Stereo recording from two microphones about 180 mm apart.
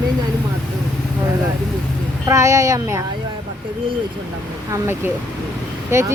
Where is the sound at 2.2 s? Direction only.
15° right (ahead or behind).